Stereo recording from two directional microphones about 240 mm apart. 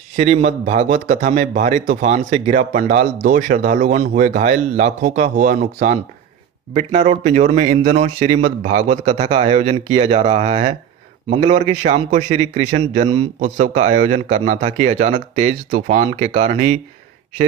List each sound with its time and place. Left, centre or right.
0.2 s a man's voice: right